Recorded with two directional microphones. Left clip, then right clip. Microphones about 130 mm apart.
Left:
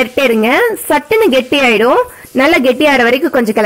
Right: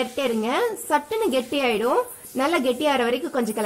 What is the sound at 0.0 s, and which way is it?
A woman's voice, 25° left (ahead or behind).